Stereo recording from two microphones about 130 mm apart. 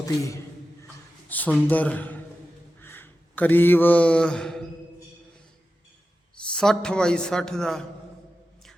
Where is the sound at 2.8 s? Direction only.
15° left (ahead or behind).